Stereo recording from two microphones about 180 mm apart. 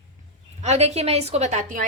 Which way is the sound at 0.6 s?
35° right (ahead or behind).